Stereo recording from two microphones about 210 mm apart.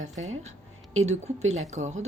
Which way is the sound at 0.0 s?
35° right (ahead or behind).